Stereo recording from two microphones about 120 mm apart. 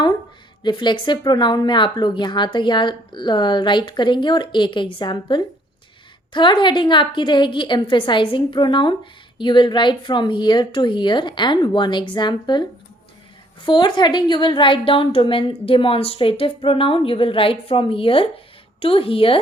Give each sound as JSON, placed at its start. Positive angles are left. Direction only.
{"t": 0.6, "sound": "a woman's voice", "side_deg": 40}